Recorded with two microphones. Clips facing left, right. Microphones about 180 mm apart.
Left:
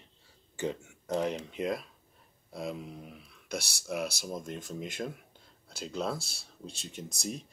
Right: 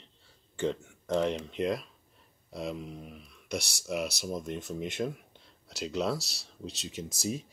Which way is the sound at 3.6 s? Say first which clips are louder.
Right 1 dB; 60° left (ahead or behind).